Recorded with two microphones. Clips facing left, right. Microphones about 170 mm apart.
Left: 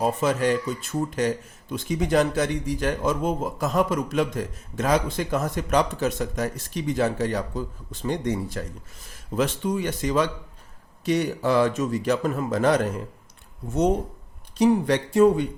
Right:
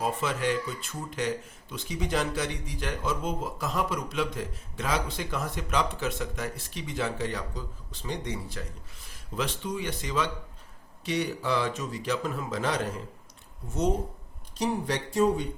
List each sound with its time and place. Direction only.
0.0 s speech: 45° left (ahead or behind)
14.6 s speech: 60° left (ahead or behind)